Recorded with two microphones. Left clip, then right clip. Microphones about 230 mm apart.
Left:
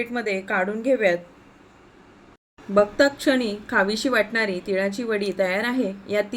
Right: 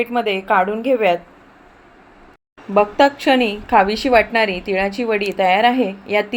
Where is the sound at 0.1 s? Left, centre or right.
Right.